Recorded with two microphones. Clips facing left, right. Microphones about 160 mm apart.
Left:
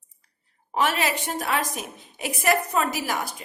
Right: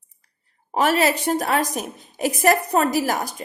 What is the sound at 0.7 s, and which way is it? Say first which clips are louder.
A woman's voice: right 5 dB; 40° right (ahead or behind).